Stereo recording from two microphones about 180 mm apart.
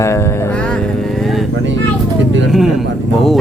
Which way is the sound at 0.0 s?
15° left (ahead or behind).